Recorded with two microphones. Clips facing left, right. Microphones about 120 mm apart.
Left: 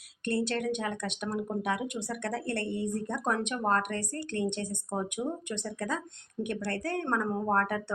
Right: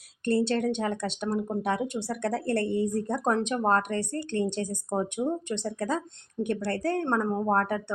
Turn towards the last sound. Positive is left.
turn(degrees=-25)  # may be behind; listen again after turning